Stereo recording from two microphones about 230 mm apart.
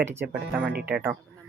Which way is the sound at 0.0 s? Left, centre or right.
Centre.